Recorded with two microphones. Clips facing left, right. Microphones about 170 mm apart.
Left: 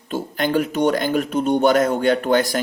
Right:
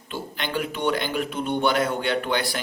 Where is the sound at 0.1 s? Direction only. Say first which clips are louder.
Left 9 dB; 45° left (ahead or behind).